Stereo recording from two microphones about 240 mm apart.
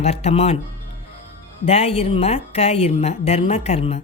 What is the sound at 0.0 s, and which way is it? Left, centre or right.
Speech, left.